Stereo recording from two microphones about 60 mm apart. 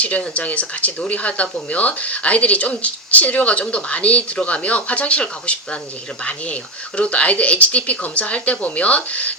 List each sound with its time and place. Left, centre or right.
0.0 s speech: left